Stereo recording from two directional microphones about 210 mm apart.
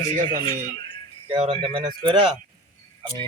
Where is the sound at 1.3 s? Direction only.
25° right (ahead or behind).